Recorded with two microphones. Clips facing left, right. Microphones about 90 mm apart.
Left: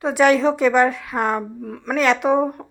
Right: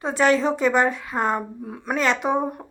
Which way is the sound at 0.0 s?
5° left (ahead or behind).